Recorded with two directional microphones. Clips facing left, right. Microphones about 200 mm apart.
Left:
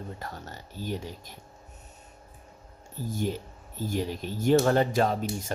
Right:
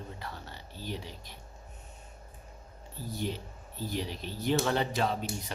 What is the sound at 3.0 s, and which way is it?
Speech, 45° left (ahead or behind).